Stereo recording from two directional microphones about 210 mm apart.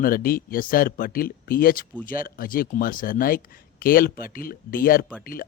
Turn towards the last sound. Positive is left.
turn(degrees=45)  # may be behind; listen again after turning